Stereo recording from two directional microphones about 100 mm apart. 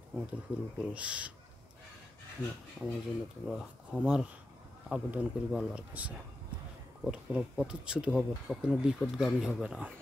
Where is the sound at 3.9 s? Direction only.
10° right (ahead or behind).